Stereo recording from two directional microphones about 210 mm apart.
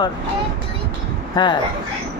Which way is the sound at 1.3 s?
20° left (ahead or behind).